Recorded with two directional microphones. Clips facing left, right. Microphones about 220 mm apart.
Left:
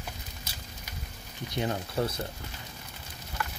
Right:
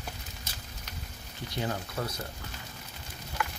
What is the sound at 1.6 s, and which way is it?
Speech, 25° left (ahead or behind).